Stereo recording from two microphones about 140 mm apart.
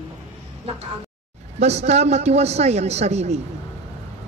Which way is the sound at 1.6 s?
50° right (ahead or behind).